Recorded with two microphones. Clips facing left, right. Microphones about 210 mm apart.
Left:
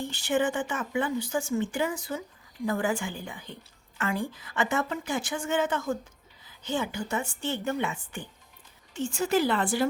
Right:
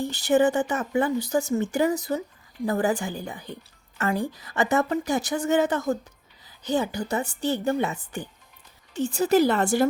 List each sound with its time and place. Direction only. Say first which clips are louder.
0.0 s a woman's voice: right 6 dB; 40° right (ahead or behind)